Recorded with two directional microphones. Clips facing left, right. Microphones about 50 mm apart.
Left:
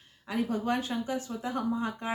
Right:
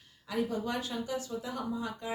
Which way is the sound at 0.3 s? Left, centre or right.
Left.